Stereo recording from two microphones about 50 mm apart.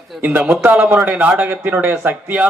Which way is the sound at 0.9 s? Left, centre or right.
Right.